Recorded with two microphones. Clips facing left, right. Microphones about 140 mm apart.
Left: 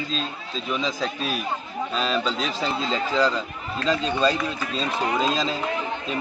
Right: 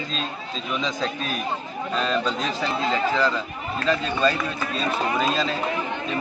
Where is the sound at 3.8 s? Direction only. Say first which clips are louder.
Even; 20° left (ahead or behind).